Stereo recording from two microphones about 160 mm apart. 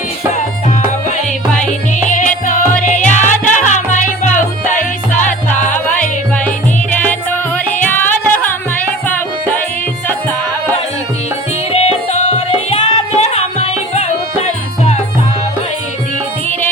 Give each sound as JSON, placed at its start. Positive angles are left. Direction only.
{"t": 2.0, "sound": "music", "side_deg": 55}
{"t": 5.5, "sound": "music", "side_deg": 10}
{"t": 11.7, "sound": "music", "side_deg": 40}